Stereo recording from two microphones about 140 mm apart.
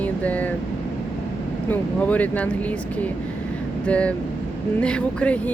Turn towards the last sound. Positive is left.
turn(degrees=10)  # may be behind; listen again after turning